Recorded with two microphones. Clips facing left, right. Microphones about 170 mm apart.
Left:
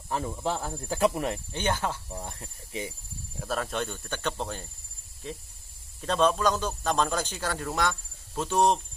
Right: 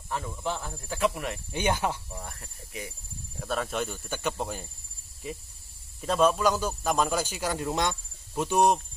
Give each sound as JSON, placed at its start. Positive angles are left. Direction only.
{"t": 0.1, "sound": "speech", "side_deg": 30}
{"t": 1.5, "sound": "a man's voice", "side_deg": -15}
{"t": 2.0, "sound": "cricket", "side_deg": 25}
{"t": 3.3, "sound": "a man's voice", "side_deg": 0}